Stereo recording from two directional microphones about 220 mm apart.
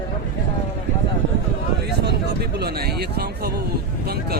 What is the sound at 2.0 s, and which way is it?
Speech, 45° right (ahead or behind).